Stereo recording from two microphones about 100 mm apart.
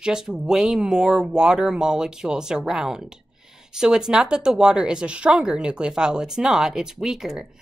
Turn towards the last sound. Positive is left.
turn(degrees=-5)  # may be behind; listen again after turning